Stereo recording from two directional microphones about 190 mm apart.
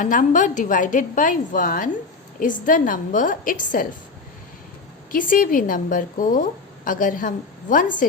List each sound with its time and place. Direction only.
0.0 s a woman's voice: 45° left (ahead or behind)
5.1 s a woman's voice: 45° left (ahead or behind)